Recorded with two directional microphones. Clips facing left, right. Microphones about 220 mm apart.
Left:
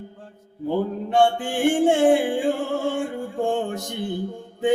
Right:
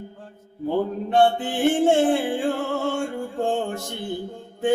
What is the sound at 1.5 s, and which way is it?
Music, 15° left (ahead or behind).